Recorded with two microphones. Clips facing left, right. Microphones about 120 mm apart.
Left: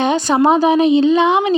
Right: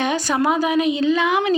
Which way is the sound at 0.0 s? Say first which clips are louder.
Left 6 dB; 25° left (ahead or behind).